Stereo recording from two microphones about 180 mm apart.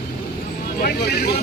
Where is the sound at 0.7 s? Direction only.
60° left (ahead or behind).